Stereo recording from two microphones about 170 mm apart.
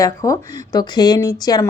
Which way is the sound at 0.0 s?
20° left (ahead or behind).